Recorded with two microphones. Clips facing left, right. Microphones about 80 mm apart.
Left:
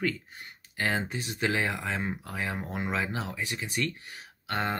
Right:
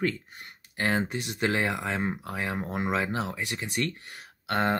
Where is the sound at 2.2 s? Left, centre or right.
Right.